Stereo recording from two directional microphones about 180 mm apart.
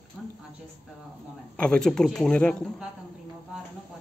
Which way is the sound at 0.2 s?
5° right (ahead or behind).